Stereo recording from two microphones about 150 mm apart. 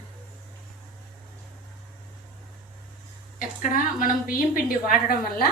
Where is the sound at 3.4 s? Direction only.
65° left (ahead or behind).